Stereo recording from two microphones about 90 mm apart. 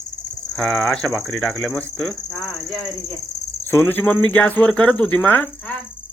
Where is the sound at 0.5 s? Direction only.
5° left (ahead or behind).